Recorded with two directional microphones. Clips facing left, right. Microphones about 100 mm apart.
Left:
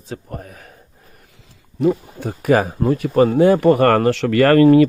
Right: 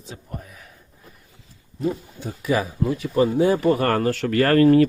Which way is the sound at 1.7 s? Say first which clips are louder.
Left 8 dB; 65° left (ahead or behind).